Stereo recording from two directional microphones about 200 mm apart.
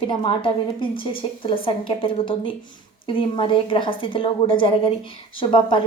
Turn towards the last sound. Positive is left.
turn(degrees=25)  # may be behind; listen again after turning